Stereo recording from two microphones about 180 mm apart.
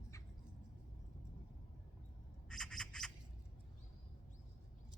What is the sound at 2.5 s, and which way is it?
Squawk, 5° left (ahead or behind).